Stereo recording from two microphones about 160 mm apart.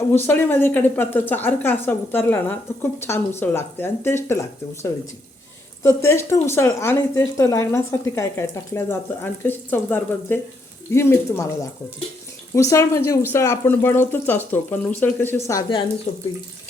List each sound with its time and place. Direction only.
0.1 s speech: 10° left (ahead or behind)
16.1 s speech: 60° left (ahead or behind)